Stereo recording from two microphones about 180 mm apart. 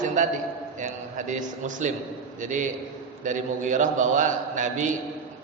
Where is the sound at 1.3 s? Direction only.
45° right (ahead or behind).